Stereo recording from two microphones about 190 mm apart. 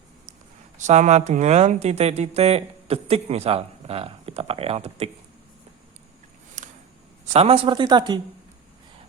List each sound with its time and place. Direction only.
0.8 s speech: 40° right (ahead or behind)
6.6 s a sound: 40° right (ahead or behind)
7.3 s speech: 30° right (ahead or behind)